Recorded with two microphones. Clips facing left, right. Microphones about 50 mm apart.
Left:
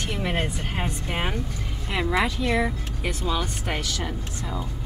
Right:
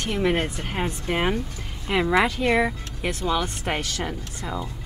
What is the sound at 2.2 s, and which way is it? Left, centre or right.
Speech, right.